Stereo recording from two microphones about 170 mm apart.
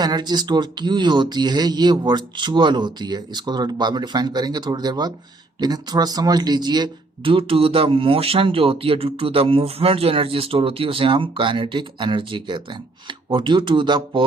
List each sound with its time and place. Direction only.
0.0 s speech: 25° right (ahead or behind)